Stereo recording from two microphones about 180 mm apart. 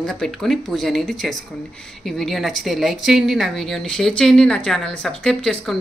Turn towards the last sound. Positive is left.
turn(degrees=5)  # may be behind; listen again after turning